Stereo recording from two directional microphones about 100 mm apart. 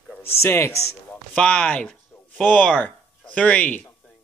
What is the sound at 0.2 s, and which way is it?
Speech, 25° left (ahead or behind).